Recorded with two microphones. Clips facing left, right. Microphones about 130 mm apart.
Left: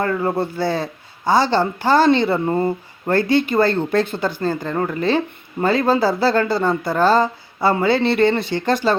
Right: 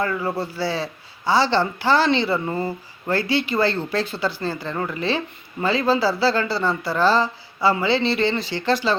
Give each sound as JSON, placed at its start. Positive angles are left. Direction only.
{"t": 0.0, "sound": "speech", "side_deg": 50}